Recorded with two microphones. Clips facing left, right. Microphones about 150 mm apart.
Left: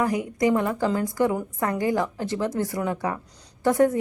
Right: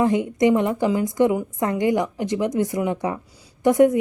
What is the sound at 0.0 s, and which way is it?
A woman's voice, 25° right (ahead or behind).